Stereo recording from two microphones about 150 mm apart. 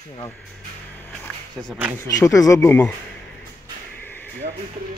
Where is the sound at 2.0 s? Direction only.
20° left (ahead or behind).